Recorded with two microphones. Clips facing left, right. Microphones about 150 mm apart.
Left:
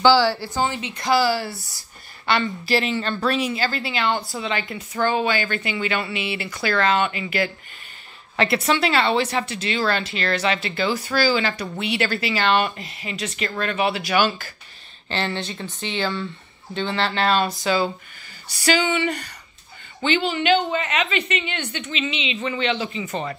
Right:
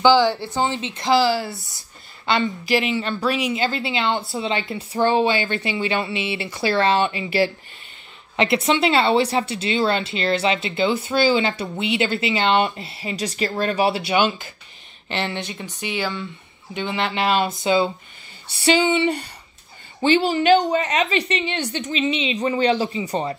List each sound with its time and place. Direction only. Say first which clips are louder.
0.0 s a woman's voice: right 1 dB; 20° right (ahead or behind)